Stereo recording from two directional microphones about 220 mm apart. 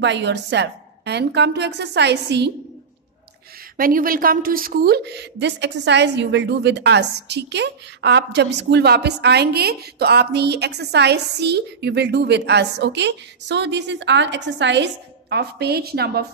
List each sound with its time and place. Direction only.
0.0 s a woman's voice: 55° right (ahead or behind)
3.7 s a woman's voice: 40° right (ahead or behind)